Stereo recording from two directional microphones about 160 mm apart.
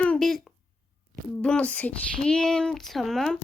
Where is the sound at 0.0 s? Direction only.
5° left (ahead or behind).